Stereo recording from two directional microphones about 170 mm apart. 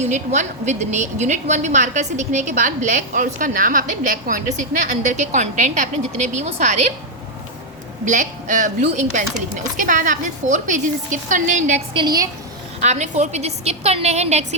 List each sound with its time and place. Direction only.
0.0 s a woman's voice: 45° right (ahead or behind)
8.0 s a woman's voice: 45° right (ahead or behind)
11.9 s a woman's voice: 25° right (ahead or behind)
12.8 s a woman's voice: 40° right (ahead or behind)